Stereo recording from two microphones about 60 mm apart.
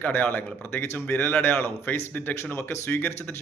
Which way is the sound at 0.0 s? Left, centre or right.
Left.